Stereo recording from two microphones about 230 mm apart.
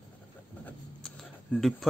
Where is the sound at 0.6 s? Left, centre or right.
Centre.